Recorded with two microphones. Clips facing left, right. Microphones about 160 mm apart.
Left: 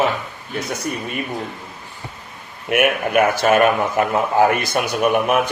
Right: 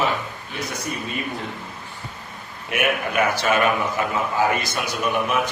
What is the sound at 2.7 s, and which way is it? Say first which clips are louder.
Speech: left 6 dB; 60° left (ahead or behind).